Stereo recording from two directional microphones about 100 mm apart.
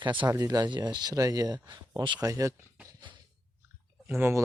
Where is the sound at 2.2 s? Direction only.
35° right (ahead or behind).